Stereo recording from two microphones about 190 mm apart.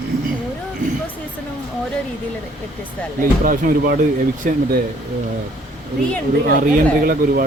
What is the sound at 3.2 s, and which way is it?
Speech, 45° right (ahead or behind).